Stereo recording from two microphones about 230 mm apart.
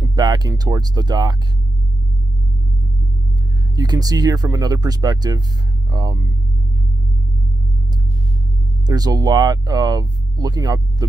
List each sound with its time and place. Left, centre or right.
0.0 s speech: centre
3.7 s speech: centre
8.8 s speech: centre